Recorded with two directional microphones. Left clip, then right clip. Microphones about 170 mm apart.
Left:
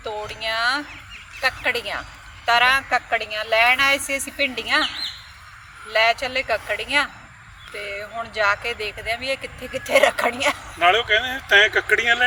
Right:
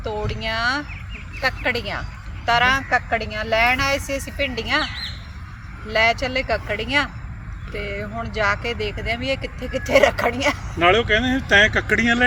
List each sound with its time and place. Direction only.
0.0 s speech: centre (ahead or behind)
5.9 s speech: centre (ahead or behind)
10.8 s speech: 65° left (ahead or behind)